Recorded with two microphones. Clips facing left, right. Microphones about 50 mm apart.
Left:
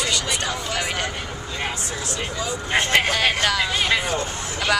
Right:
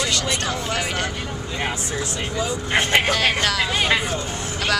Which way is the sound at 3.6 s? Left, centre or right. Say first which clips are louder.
Right 1 dB; centre.